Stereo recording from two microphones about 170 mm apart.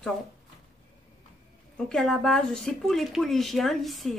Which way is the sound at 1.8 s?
5° left (ahead or behind).